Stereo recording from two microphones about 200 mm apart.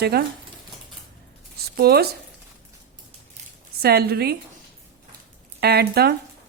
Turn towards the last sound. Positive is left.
turn(degrees=-55)  # may be behind; listen again after turning